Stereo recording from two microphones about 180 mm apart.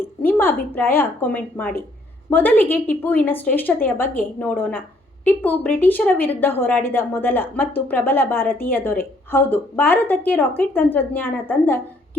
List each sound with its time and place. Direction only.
0.2 s a woman's voice: 10° left (ahead or behind)